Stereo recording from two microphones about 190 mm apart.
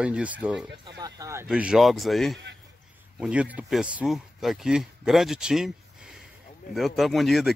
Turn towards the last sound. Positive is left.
turn(degrees=0)  # may be behind; listen again after turning